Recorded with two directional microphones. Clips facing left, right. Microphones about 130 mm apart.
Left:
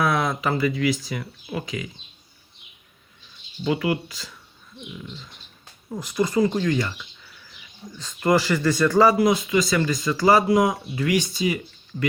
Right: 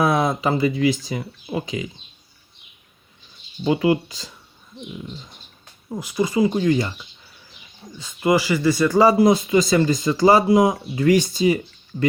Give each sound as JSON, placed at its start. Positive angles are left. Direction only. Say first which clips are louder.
{"t": 0.0, "sound": "speech", "louder": "right 3 dB", "side_deg": -25}
{"t": 3.6, "sound": "speech", "louder": "right 5 dB", "side_deg": -25}
{"t": 5.9, "sound": "speech", "louder": "right 1 dB", "side_deg": -10}
{"t": 6.6, "sound": "speech", "louder": "right 4 dB", "side_deg": -25}
{"t": 7.9, "sound": "speech", "louder": "right 1 dB", "side_deg": -10}
{"t": 9.0, "sound": "speech", "louder": "right 3 dB", "side_deg": -30}
{"t": 11.0, "sound": "speech", "louder": "right 6 dB", "side_deg": -35}